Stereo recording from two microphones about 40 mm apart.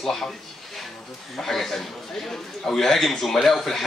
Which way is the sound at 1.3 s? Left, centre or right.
Centre.